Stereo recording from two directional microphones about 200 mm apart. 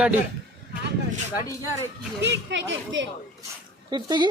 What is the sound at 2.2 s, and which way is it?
Speech, 60° right (ahead or behind).